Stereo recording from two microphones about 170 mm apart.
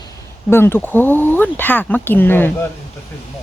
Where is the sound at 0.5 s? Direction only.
15° left (ahead or behind).